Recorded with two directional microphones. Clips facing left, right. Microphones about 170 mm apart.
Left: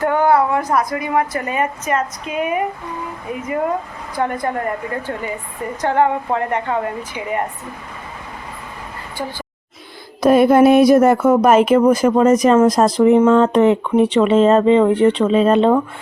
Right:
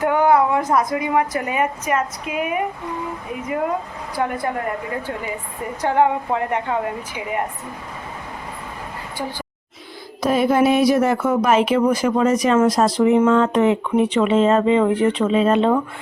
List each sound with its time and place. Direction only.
0.0 s a woman's voice: 15° right (ahead or behind)
4.1 s a woman's voice: 5° right (ahead or behind)
5.8 s a woman's voice: 10° right (ahead or behind)
10.2 s speech: 55° left (ahead or behind); by 15.8 s 35° left (ahead or behind)